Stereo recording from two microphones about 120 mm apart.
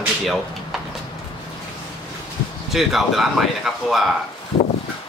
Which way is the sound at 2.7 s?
Centre (ahead or behind).